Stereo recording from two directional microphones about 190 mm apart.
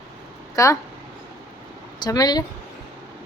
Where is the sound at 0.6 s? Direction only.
15° left (ahead or behind).